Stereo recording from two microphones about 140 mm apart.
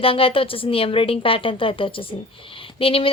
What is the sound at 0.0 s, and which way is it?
A woman's voice, 40° left (ahead or behind).